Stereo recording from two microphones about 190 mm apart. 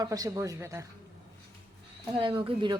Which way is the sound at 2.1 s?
25° right (ahead or behind).